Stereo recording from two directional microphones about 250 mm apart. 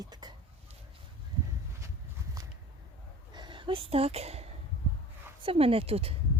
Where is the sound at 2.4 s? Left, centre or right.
Centre.